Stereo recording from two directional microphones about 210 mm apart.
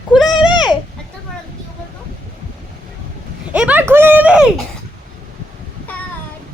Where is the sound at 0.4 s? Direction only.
20° left (ahead or behind).